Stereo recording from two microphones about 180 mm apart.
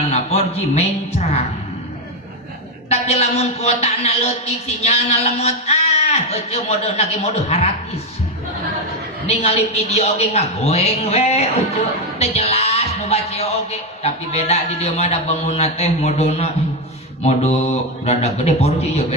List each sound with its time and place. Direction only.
0.1 s a man's voice: 35° left (ahead or behind)
2.9 s a man's voice: 35° left (ahead or behind)
9.2 s a man's voice: 35° left (ahead or behind)